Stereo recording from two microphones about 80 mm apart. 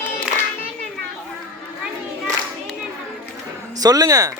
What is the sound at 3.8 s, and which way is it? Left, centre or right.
Music, right.